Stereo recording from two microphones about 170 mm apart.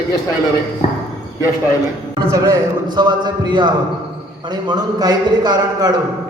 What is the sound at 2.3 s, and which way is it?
Speech, 20° right (ahead or behind).